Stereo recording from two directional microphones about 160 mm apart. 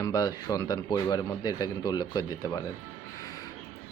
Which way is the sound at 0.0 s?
25° left (ahead or behind).